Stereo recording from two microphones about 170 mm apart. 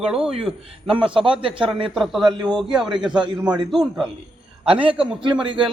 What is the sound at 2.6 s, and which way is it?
Speech, 5° right (ahead or behind).